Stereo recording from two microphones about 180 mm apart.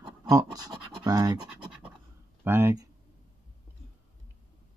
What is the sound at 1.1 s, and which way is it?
Speech, 20° right (ahead or behind).